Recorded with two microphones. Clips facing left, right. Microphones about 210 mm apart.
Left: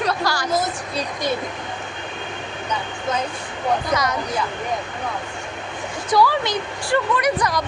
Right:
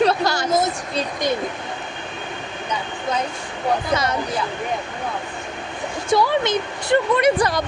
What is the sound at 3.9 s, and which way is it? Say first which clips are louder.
Speech: right 1 dB; 25° right (ahead or behind).